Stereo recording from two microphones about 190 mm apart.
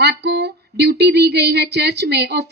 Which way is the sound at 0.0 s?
60° right (ahead or behind).